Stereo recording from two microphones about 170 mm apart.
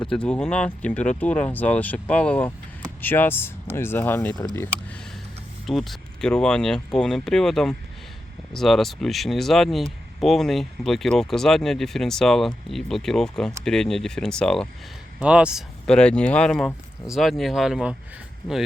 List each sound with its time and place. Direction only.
0.0 s speech: 5° left (ahead or behind)
15.2 s speech: 5° right (ahead or behind)
15.9 s speech: 5° left (ahead or behind)